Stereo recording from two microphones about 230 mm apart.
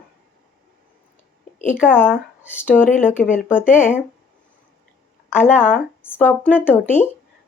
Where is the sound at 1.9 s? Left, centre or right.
Centre.